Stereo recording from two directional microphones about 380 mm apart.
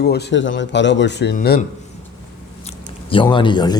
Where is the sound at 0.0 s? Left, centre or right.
Left.